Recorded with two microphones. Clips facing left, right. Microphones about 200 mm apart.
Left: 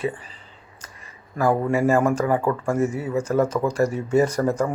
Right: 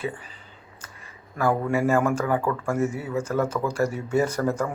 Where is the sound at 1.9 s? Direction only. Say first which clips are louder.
Left 3 dB; 35° left (ahead or behind).